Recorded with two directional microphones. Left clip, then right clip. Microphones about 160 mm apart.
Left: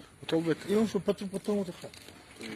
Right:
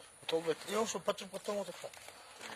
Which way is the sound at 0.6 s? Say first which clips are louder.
Left 6 dB; 25° right (ahead or behind).